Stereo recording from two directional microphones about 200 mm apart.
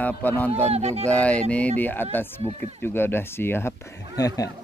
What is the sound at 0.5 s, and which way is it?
Speech, 30° right (ahead or behind).